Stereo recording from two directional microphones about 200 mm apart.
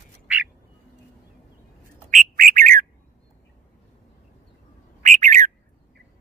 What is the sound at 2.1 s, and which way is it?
Bird, 40° right (ahead or behind).